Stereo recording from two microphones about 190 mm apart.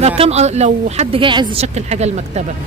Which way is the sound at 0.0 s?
35° right (ahead or behind).